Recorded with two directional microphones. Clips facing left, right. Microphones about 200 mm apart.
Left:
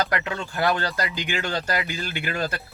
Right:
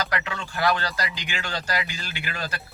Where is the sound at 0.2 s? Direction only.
45° left (ahead or behind).